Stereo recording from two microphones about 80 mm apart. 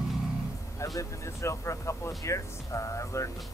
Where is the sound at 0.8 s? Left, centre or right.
Left.